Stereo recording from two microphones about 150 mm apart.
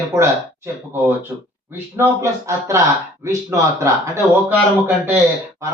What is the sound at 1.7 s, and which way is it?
A man's voice, 15° right (ahead or behind).